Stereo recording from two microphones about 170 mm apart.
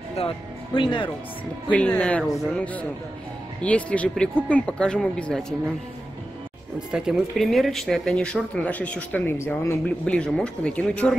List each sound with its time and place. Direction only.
0.7 s speech: 30° left (ahead or behind)
1.7 s speech: 5° left (ahead or behind)
6.9 s speech: 5° right (ahead or behind)